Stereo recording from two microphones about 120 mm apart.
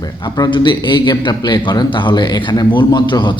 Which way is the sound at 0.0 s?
35° left (ahead or behind).